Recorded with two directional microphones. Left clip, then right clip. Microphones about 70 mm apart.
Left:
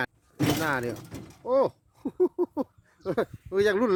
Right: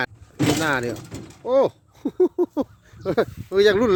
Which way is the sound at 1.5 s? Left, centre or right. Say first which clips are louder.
Right 5 dB; centre.